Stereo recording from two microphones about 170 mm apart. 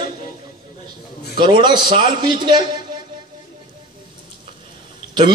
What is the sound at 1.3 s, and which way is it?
A man's voice, 30° right (ahead or behind).